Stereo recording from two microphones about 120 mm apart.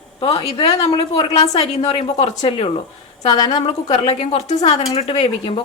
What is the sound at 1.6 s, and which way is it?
A woman's voice, 60° left (ahead or behind).